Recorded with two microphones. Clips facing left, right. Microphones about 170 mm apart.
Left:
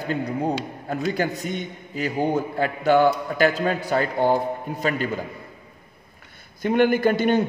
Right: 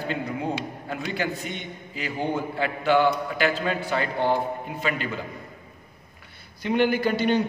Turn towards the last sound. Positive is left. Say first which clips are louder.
# left 3 dB
turn(degrees=50)  # may be behind; listen again after turning